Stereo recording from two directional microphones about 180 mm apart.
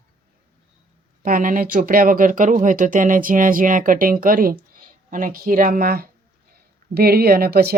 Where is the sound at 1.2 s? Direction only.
50° right (ahead or behind).